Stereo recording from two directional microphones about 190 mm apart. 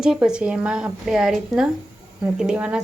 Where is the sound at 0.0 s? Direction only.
5° right (ahead or behind).